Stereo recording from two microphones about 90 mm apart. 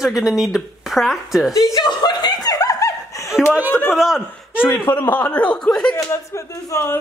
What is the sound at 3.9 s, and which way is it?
Speech, 5° right (ahead or behind).